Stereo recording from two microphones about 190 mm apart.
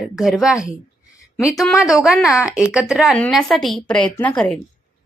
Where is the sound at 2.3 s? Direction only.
15° left (ahead or behind).